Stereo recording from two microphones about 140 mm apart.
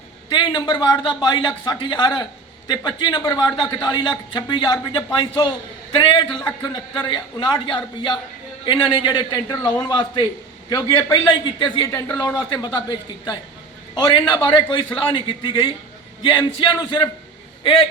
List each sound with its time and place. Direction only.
0.3 s a man's voice: 35° left (ahead or behind)
6.0 s a man's voice: 35° left (ahead or behind)
11.9 s speech: 20° left (ahead or behind)
13.9 s a man's voice: 30° left (ahead or behind)